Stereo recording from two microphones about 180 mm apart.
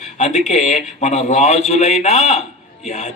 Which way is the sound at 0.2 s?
40° left (ahead or behind).